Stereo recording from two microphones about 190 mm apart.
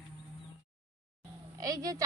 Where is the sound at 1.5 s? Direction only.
20° right (ahead or behind).